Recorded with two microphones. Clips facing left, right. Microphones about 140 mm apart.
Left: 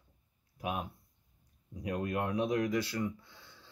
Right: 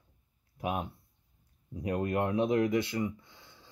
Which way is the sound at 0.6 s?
25° right (ahead or behind).